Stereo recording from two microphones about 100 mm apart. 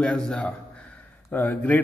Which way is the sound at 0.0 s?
5° left (ahead or behind).